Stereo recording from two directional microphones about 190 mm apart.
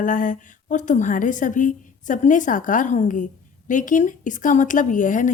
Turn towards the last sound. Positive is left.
turn(degrees=45)  # may be behind; listen again after turning